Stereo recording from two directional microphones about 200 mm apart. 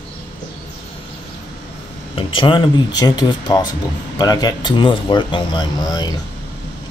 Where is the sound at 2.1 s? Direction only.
25° left (ahead or behind).